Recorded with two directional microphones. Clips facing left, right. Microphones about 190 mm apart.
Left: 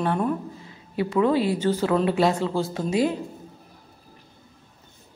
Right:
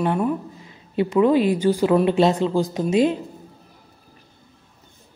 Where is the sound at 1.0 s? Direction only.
20° right (ahead or behind).